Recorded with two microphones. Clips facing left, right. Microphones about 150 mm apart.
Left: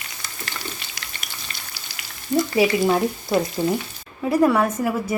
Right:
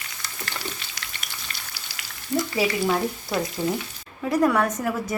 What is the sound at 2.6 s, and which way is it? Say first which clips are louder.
A woman's voice: left 5 dB; 15° left (ahead or behind).